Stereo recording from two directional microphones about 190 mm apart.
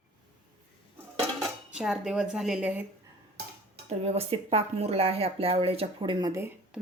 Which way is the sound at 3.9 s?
35° right (ahead or behind).